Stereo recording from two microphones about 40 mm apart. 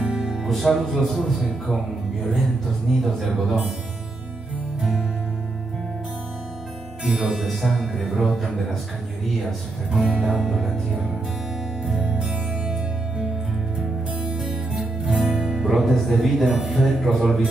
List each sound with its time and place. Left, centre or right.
0.0 s music: right
0.5 s speech: centre
2.9 s speech: centre
7.2 s music: centre
7.4 s speech: centre
9.9 s music: right
10.4 s music: centre
12.0 s music: centre
14.3 s music: centre
15.6 s speech: centre